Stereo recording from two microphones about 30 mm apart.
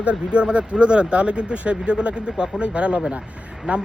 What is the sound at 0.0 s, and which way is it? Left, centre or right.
Speech, right.